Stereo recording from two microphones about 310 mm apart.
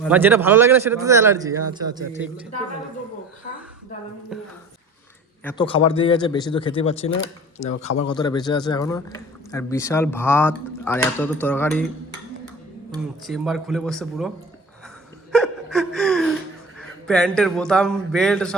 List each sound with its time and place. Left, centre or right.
0.0 s speech: centre
4.3 s a man's voice: centre
5.6 s speech: centre
13.2 s a man's voice: centre
15.3 s a sound: centre
17.1 s a man's voice: centre